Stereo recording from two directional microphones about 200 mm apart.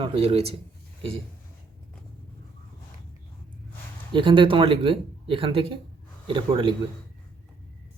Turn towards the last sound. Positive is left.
turn(degrees=-25)  # may be behind; listen again after turning